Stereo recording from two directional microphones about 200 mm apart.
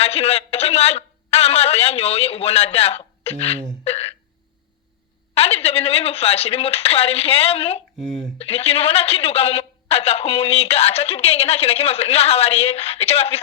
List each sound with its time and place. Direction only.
0.0 s a man's voice: 30° left (ahead or behind)
3.8 s hiccup: 30° left (ahead or behind)
5.3 s a woman's voice: 30° left (ahead or behind)